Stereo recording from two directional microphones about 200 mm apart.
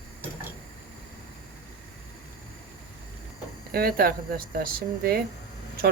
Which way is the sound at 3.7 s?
50° right (ahead or behind).